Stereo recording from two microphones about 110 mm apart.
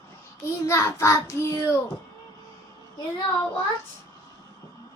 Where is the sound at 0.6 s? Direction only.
25° left (ahead or behind).